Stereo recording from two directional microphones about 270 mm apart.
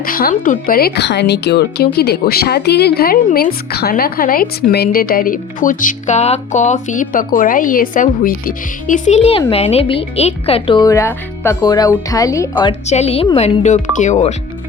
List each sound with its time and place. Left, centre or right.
0.0 s speech: left